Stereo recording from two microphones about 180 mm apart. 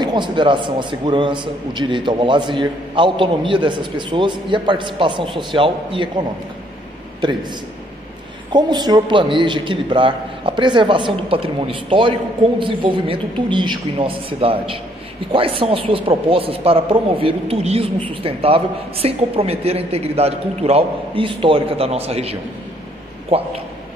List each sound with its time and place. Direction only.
0.0 s a man's voice: 25° right (ahead or behind)
8.5 s a man's voice: 25° right (ahead or behind)